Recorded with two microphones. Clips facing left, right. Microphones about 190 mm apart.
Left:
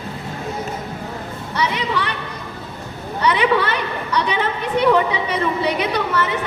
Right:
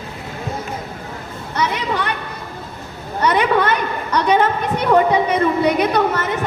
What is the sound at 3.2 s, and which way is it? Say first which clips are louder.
A woman's voice: right 1 dB; 45° right (ahead or behind).